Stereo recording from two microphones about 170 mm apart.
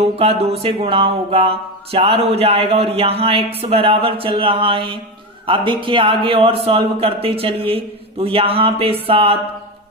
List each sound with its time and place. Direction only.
0.2 s speech: 35° right (ahead or behind)